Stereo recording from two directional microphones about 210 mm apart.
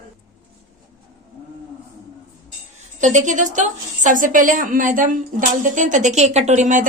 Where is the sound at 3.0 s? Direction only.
35° right (ahead or behind).